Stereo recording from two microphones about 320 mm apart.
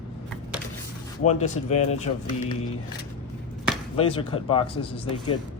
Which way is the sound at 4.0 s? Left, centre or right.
Centre.